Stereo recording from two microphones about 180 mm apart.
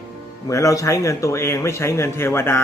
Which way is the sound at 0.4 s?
20° left (ahead or behind).